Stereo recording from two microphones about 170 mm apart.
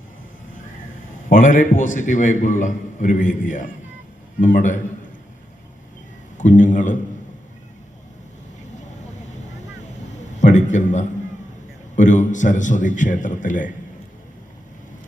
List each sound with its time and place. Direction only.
1.3 s a man's voice: 50° left (ahead or behind)
6.3 s a man's voice: 45° left (ahead or behind)
10.4 s a sound: 45° left (ahead or behind)
11.9 s a man's voice: 45° left (ahead or behind)